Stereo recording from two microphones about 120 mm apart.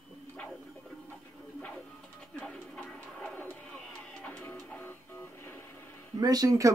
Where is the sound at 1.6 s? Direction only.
10° left (ahead or behind).